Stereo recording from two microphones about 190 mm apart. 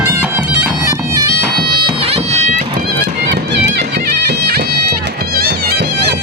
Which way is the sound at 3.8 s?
60° right (ahead or behind).